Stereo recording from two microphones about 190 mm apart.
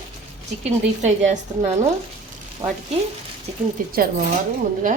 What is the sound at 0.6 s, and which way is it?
A woman's voice, 40° right (ahead or behind).